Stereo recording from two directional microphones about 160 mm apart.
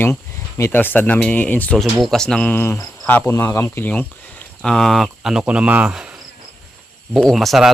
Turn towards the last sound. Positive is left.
turn(degrees=0)  # may be behind; listen again after turning